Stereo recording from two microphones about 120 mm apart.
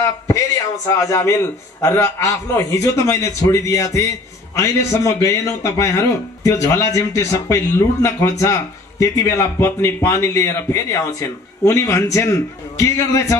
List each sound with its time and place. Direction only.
0.9 s speech: 25° left (ahead or behind)